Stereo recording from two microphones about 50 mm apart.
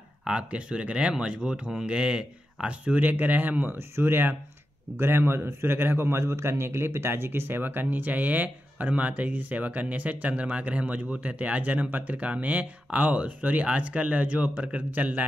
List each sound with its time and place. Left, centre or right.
0.2 s a man's voice: right